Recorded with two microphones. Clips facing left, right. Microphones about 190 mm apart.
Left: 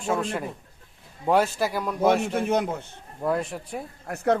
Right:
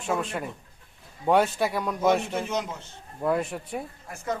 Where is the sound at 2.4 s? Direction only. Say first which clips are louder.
Left 5 dB; 55° left (ahead or behind).